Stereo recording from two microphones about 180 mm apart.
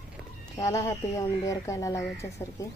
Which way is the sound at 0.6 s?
15° left (ahead or behind).